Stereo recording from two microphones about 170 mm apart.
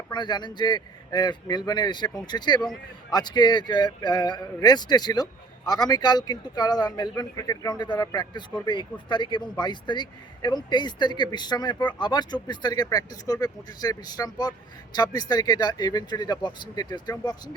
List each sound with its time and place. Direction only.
0.1 s speech: 25° left (ahead or behind)